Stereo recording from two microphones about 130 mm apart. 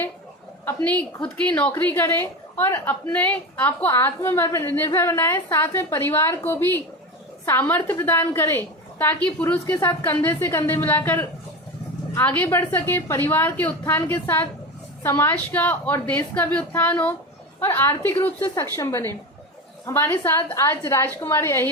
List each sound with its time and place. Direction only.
0.6 s a woman's voice: 15° left (ahead or behind)